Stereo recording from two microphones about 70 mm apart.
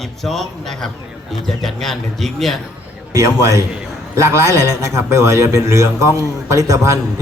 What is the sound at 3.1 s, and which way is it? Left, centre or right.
A man's voice, right.